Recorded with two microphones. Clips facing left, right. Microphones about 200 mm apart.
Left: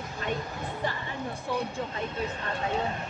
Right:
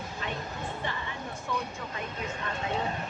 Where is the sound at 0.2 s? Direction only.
45° left (ahead or behind).